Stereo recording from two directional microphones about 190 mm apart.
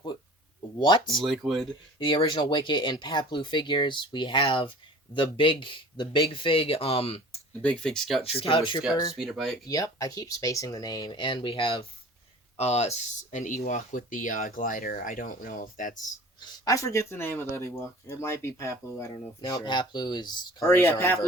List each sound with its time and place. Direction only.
0.8 s speech: 25° left (ahead or behind)
1.2 s speech: centre (ahead or behind)
2.0 s speech: 25° left (ahead or behind)
7.6 s speech: 5° left (ahead or behind)
8.4 s speech: 30° left (ahead or behind)
9.1 s speech: centre (ahead or behind)
9.6 s speech: 20° left (ahead or behind); by 16.0 s 45° left (ahead or behind)
16.4 s speech: 20° left (ahead or behind)